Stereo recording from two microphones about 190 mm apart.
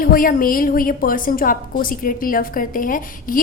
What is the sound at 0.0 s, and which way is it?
A woman's voice, 50° left (ahead or behind).